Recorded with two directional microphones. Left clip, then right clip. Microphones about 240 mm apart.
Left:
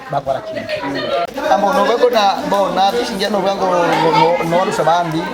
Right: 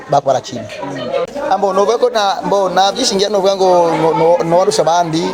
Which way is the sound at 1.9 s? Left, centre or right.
Right.